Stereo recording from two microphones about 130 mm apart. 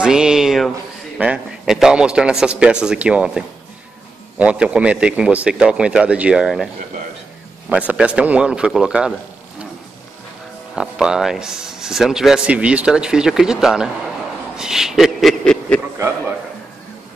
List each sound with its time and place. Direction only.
0.0 s speech: 5° right (ahead or behind)
7.7 s speech: 10° right (ahead or behind)
10.8 s speech: 5° right (ahead or behind)